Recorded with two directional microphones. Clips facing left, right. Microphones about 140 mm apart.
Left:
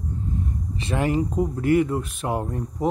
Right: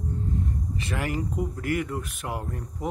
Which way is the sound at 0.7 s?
25° left (ahead or behind).